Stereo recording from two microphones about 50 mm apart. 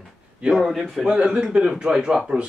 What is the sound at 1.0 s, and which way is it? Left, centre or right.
A man's voice, right.